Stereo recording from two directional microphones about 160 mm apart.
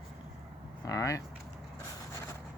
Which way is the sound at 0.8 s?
20° left (ahead or behind).